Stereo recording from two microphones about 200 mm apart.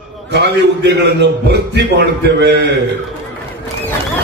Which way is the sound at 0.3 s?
55° right (ahead or behind).